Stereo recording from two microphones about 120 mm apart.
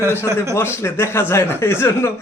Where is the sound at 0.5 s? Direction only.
20° left (ahead or behind).